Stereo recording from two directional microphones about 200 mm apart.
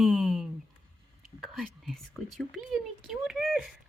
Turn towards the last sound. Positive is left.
turn(degrees=0)  # may be behind; listen again after turning